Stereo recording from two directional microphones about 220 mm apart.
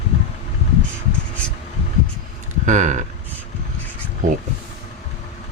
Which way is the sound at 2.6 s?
35° right (ahead or behind).